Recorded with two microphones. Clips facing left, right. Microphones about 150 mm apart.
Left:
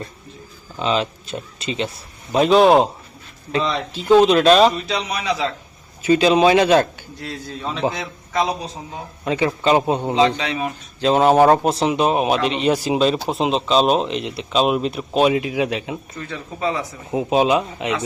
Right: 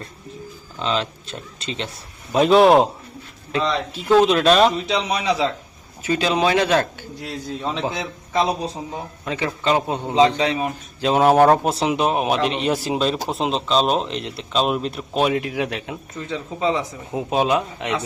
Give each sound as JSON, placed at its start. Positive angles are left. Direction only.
{"t": 0.8, "sound": "speech", "side_deg": 10}
{"t": 4.9, "sound": "speech", "side_deg": -25}
{"t": 6.1, "sound": "speech", "side_deg": 10}
{"t": 7.2, "sound": "a man's voice", "side_deg": -15}
{"t": 9.2, "sound": "speech", "side_deg": 10}
{"t": 10.3, "sound": "speech", "side_deg": -35}
{"t": 11.0, "sound": "speech", "side_deg": -5}
{"t": 16.1, "sound": "speech", "side_deg": -15}
{"t": 17.1, "sound": "speech", "side_deg": 10}